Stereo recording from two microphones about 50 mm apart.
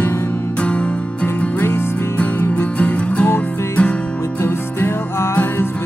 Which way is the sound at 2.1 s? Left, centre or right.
Left.